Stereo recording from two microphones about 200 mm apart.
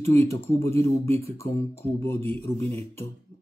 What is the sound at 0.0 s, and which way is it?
Speech, 15° left (ahead or behind).